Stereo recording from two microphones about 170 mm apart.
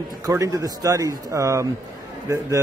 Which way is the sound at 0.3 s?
20° right (ahead or behind).